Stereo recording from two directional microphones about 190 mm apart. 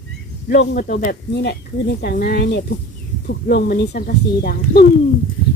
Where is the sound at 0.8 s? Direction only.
45° left (ahead or behind).